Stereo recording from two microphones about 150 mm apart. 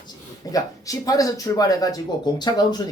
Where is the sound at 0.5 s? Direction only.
25° left (ahead or behind).